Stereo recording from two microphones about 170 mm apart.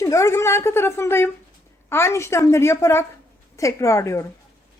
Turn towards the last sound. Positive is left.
turn(degrees=15)  # may be behind; listen again after turning